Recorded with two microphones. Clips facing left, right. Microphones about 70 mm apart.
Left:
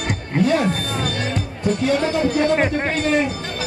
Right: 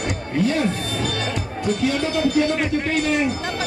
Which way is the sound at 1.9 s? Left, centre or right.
Left.